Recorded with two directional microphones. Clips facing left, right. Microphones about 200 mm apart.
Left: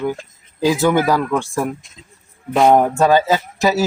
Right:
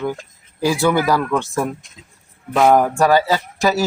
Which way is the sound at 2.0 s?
10° right (ahead or behind).